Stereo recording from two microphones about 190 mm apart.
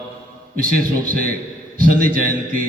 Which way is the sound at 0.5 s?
50° right (ahead or behind).